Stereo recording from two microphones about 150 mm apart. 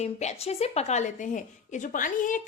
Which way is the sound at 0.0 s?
50° left (ahead or behind).